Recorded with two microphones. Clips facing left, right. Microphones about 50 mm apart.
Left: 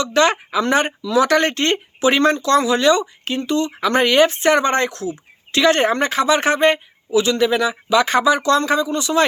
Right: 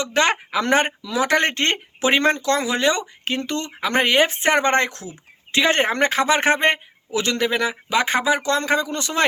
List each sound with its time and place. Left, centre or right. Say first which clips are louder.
0.0 s speech: left 3 dB; right
3.2 s speech: left 4 dB; right
3.8 s speech: left 3 dB; right
7.1 s speech: left 5 dB; right